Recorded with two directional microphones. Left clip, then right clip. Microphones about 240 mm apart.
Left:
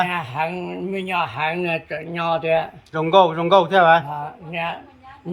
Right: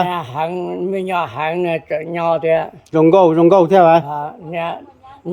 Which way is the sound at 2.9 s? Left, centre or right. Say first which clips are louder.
Right 5 dB; right.